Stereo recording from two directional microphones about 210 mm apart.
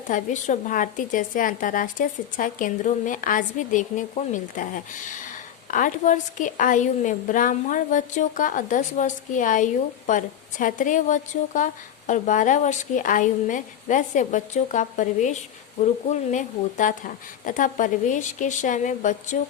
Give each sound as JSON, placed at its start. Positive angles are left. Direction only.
{"t": 0.1, "sound": "a woman's voice", "side_deg": 35}